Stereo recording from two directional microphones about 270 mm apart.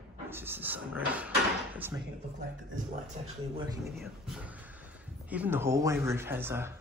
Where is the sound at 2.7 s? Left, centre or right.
Right.